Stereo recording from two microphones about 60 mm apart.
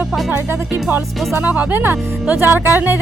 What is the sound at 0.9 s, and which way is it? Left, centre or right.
Speech, right.